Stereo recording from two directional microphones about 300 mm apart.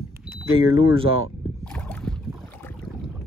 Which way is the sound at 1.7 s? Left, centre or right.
Centre.